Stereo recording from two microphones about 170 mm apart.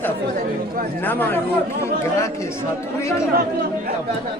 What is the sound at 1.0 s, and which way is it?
Speech, 10° left (ahead or behind).